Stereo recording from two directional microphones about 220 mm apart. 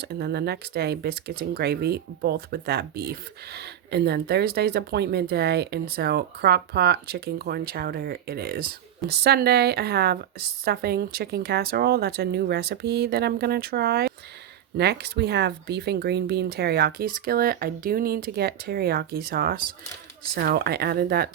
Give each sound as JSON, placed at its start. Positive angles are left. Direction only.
{"t": 0.0, "sound": "speech", "side_deg": -45}